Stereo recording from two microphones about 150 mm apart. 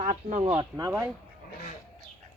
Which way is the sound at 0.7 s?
20° right (ahead or behind).